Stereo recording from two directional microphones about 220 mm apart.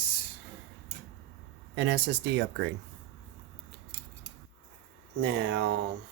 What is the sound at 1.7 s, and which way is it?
Speech, 55° right (ahead or behind).